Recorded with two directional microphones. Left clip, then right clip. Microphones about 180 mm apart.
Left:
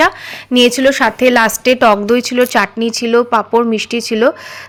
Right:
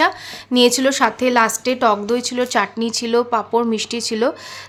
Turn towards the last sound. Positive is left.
turn(degrees=20)  # may be behind; listen again after turning